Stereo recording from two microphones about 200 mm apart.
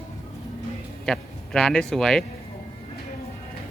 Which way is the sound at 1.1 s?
5° left (ahead or behind).